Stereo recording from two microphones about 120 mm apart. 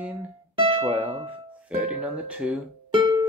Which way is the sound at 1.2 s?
10° right (ahead or behind).